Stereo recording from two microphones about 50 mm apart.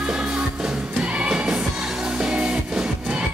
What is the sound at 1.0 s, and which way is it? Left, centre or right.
Music, centre.